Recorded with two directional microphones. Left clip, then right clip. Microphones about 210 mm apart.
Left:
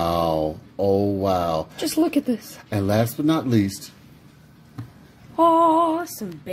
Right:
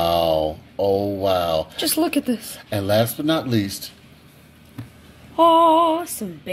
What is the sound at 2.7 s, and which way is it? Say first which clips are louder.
Speech: right 3 dB; 35° left (ahead or behind).